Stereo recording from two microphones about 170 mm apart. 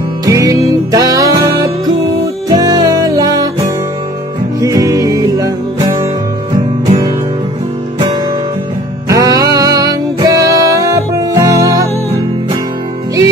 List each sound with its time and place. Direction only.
0.2 s music: 20° right (ahead or behind)
4.6 s music: 20° right (ahead or behind)
9.1 s music: 20° right (ahead or behind)